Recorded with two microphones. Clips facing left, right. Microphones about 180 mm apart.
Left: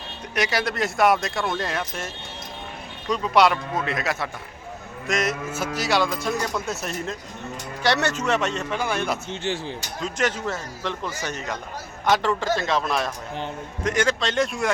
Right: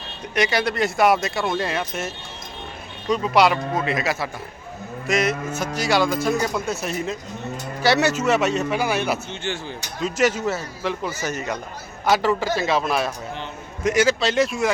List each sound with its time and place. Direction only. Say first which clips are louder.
0.3 s speech: right 3 dB; centre (ahead or behind)
3.1 s speech: right 1 dB; centre (ahead or behind)
9.3 s speech: left 1 dB; 35° left (ahead or behind)
10.0 s speech: right 5 dB; 5° right (ahead or behind)